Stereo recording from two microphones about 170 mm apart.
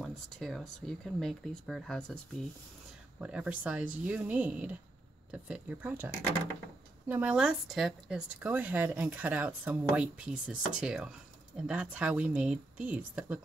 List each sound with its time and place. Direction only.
0.0 s speech: centre (ahead or behind)